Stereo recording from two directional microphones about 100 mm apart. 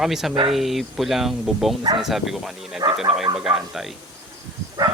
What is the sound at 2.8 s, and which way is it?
Speech, 75° right (ahead or behind).